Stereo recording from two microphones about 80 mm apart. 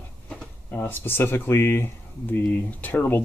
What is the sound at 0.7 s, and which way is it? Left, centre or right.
Speech, left.